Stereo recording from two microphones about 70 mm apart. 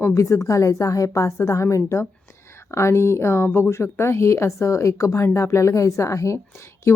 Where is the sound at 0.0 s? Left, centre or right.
Left.